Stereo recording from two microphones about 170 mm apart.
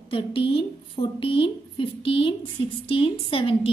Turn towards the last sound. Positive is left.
turn(degrees=30)  # may be behind; listen again after turning